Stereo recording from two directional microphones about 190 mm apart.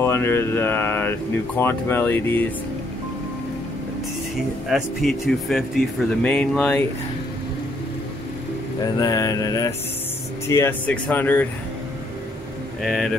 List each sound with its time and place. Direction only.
0.0 s speech: 15° left (ahead or behind)
4.6 s speech: centre (ahead or behind)
8.8 s mantra: 20° left (ahead or behind)
10.5 s speech: 10° left (ahead or behind)
12.8 s speech: centre (ahead or behind)